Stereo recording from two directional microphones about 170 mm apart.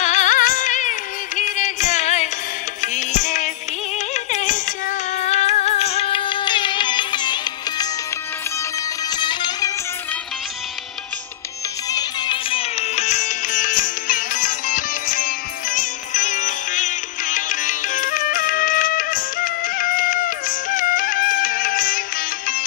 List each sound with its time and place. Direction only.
0.0 s music: 45° left (ahead or behind); by 7.9 s 25° left (ahead or behind)
9.1 s music: 25° left (ahead or behind)
11.9 s music: 25° left (ahead or behind); by 22.6 s 55° left (ahead or behind)